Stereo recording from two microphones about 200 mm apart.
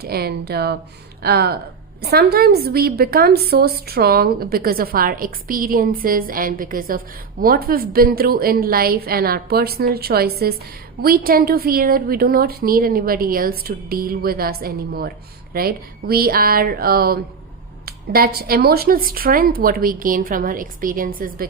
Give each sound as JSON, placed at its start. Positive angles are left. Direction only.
{"t": 0.0, "sound": "a woman's voice", "side_deg": -50}